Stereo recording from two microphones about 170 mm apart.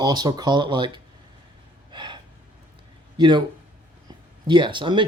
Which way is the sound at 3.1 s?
25° right (ahead or behind).